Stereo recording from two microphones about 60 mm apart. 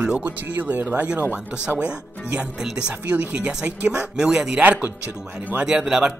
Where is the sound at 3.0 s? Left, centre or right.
Right.